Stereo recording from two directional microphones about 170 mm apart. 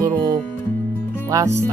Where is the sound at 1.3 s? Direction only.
20° right (ahead or behind).